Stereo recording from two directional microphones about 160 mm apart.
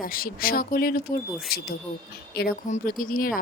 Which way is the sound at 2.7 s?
60° left (ahead or behind).